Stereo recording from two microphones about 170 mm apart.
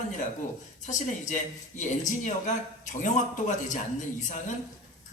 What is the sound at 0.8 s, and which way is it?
A man's voice, 45° left (ahead or behind).